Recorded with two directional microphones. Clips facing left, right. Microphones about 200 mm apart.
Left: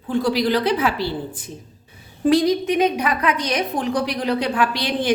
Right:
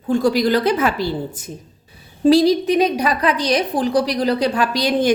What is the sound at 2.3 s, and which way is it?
A woman's voice, 35° right (ahead or behind).